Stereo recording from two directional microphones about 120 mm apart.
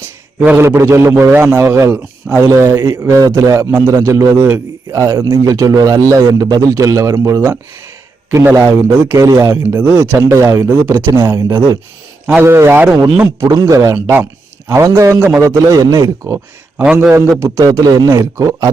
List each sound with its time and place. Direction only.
0.3 s a man's voice: 15° right (ahead or behind)
13.4 s a man's voice: 30° right (ahead or behind)
16.7 s a man's voice: 10° right (ahead or behind); by 18.7 s 25° right (ahead or behind)